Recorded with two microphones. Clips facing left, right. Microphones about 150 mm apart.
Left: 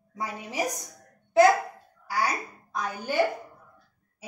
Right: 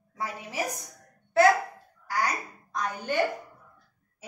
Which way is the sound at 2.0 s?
10° left (ahead or behind).